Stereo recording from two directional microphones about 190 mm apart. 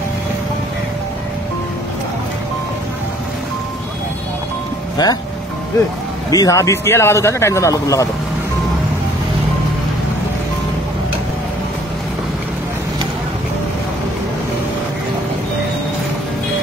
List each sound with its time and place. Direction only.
5.0 s speech: 20° left (ahead or behind)
6.3 s speech: 15° left (ahead or behind)